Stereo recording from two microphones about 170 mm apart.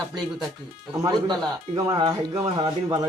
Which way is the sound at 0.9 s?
20° right (ahead or behind).